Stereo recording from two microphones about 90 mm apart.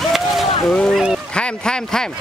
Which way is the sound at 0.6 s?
5° left (ahead or behind).